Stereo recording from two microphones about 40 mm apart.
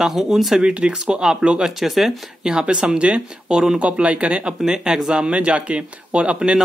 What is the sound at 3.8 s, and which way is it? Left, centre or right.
Speech, right.